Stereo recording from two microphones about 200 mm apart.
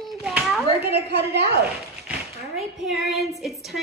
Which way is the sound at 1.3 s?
55° right (ahead or behind).